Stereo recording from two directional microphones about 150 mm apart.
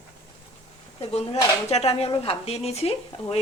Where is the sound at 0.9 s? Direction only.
45° left (ahead or behind).